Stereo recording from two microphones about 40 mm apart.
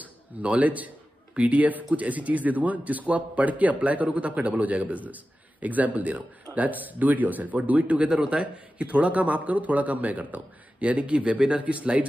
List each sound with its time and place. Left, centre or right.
0.4 s a man's voice: right
8.1 s a man's voice: right